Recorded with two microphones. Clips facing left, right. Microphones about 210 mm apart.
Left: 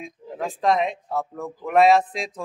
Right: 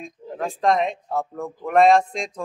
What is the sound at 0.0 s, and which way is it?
A man's voice, centre (ahead or behind).